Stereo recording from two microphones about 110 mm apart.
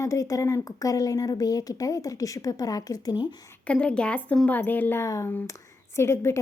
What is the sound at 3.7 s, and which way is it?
A woman's voice, 10° left (ahead or behind).